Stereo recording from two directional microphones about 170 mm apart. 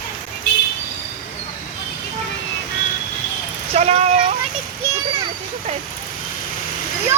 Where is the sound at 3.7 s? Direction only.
35° right (ahead or behind).